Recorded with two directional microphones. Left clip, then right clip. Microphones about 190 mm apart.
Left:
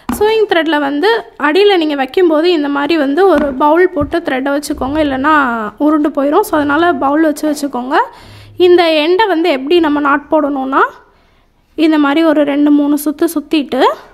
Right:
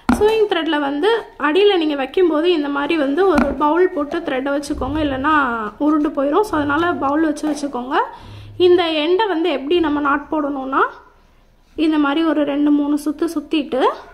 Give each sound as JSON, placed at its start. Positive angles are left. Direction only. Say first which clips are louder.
{"t": 0.2, "sound": "a woman's voice", "louder": "left 7 dB", "side_deg": 55}